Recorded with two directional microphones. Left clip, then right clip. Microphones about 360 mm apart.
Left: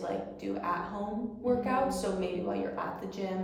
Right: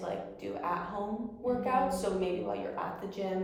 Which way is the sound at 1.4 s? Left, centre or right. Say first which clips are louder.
Even; centre.